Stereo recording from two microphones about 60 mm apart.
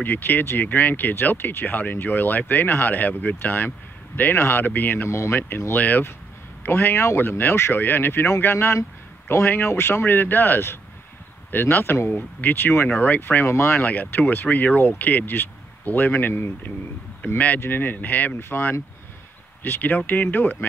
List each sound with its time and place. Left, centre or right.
0.0 s speech: left
13.5 s speech: left
13.8 s speech: left
17.6 s speech: left